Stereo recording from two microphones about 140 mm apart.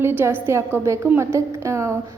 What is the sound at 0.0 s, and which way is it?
A woman's voice, 15° right (ahead or behind).